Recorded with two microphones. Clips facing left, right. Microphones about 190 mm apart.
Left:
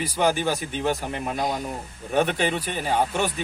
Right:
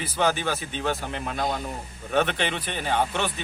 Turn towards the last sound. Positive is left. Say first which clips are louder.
# left 2 dB
turn(degrees=10)  # may be behind; listen again after turning